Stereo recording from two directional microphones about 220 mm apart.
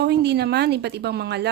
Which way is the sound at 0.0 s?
50° right (ahead or behind).